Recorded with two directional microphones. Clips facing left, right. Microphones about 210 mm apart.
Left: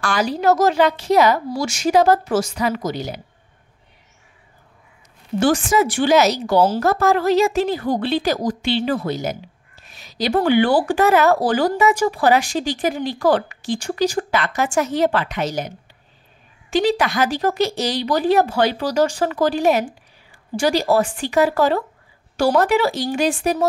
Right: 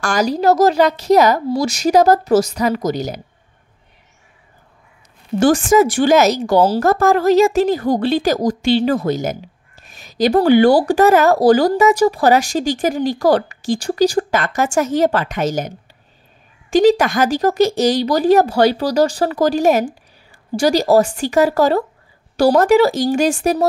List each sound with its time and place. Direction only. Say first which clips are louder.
0.0 s speech: right 3 dB; 40° right (ahead or behind)
5.4 s a woman's voice: right 5 dB; 45° right (ahead or behind)
16.7 s a woman's voice: right 6 dB; 45° right (ahead or behind)